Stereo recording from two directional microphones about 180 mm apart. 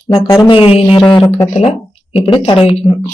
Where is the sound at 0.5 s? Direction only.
30° left (ahead or behind).